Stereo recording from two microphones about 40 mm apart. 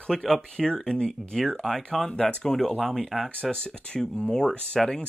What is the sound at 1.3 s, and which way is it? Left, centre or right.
Speech, centre.